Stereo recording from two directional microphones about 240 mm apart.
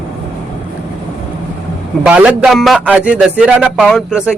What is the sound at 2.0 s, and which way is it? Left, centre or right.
Speech, centre.